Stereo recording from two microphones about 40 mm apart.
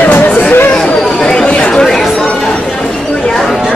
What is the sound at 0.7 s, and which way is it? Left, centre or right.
Chatter, centre.